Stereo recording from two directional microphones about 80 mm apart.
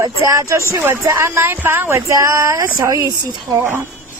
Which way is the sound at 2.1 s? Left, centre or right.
Right.